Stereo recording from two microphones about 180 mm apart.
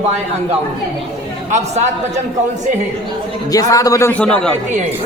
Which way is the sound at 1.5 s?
40° right (ahead or behind).